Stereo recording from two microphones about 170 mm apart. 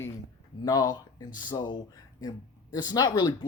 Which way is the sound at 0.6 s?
20° left (ahead or behind).